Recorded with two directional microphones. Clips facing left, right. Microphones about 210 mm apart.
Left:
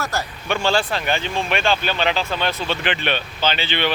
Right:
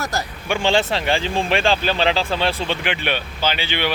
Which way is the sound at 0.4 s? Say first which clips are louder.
Right 2 dB; 15° right (ahead or behind).